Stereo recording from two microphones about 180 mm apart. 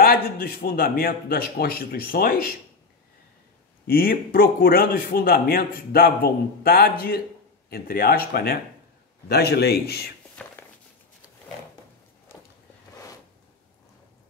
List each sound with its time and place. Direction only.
0.0 s speech: 60° left (ahead or behind)
3.8 s speech: 55° left (ahead or behind)
10.4 s a sound: 5° left (ahead or behind)